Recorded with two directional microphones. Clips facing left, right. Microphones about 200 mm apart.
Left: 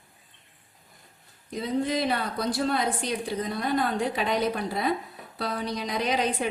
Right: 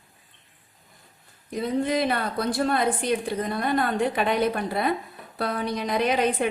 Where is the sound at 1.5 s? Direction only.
55° right (ahead or behind).